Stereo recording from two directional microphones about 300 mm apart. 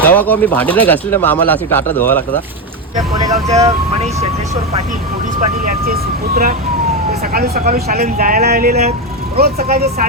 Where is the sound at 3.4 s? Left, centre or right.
Right.